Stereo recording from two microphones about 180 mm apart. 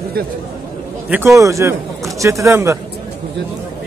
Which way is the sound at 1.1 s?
10° right (ahead or behind).